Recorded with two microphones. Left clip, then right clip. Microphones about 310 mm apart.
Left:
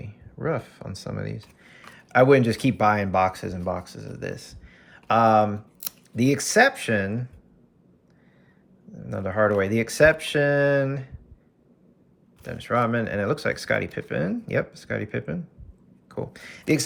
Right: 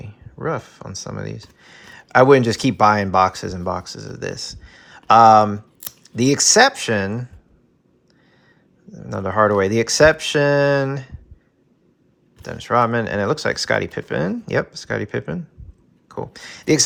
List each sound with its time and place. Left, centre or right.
0.0 s speech: centre
8.9 s speech: centre
12.4 s speech: centre